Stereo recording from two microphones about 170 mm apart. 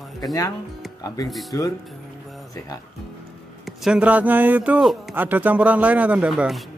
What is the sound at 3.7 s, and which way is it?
Speech, 5° right (ahead or behind).